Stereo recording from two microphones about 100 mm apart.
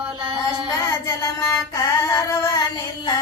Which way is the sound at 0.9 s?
30° left (ahead or behind).